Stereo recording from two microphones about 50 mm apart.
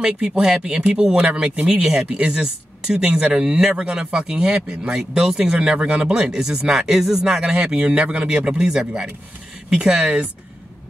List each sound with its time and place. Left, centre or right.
0.4 s speech: centre
2.0 s speech: right
3.0 s speech: centre